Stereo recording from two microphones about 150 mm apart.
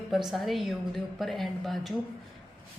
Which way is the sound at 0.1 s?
Centre (ahead or behind).